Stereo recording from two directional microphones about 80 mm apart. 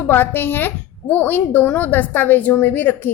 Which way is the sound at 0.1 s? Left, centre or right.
Left.